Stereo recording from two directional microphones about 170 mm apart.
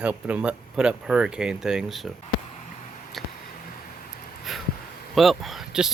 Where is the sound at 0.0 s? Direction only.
10° right (ahead or behind).